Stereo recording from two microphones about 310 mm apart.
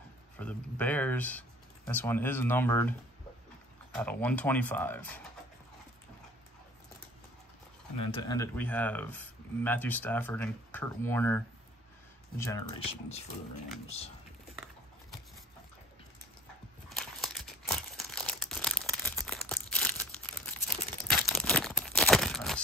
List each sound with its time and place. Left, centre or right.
0.4 s speech: centre
4.0 s speech: centre
8.0 s speech: centre
16.9 s crumpling: centre
21.3 s tearing: centre